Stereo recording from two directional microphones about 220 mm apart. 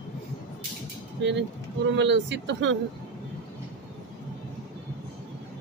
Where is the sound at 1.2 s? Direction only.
55° right (ahead or behind).